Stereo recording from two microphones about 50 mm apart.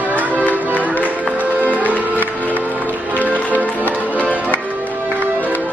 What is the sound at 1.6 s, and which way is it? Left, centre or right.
Music, right.